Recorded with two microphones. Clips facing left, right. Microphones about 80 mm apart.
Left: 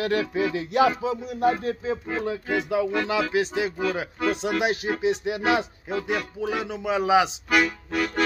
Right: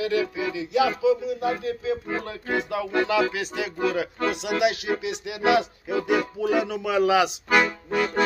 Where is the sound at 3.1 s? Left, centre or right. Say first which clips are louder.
Even; left.